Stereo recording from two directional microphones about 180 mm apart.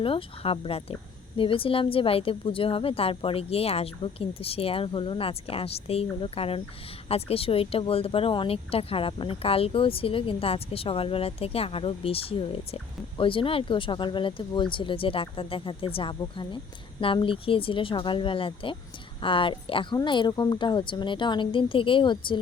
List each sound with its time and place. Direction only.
0.0 s a woman's voice: 30° left (ahead or behind)